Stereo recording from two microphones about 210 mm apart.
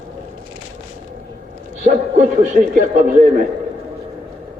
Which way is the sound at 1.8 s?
35° right (ahead or behind).